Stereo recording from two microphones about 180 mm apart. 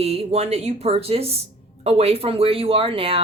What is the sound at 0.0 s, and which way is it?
A woman's voice, 35° right (ahead or behind).